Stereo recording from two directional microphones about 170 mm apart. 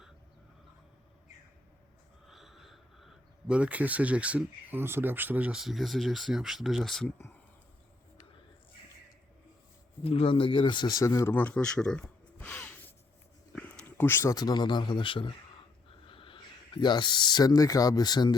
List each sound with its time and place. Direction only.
2.2 s speech: centre (ahead or behind)
10.0 s speech: 35° left (ahead or behind)